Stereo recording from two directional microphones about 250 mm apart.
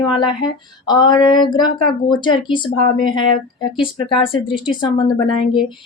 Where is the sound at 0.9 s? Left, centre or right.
Centre.